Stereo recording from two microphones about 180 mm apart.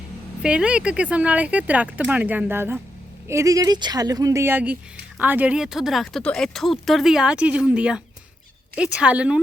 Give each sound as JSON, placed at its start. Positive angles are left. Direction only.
{"t": 0.4, "sound": "speech", "side_deg": -5}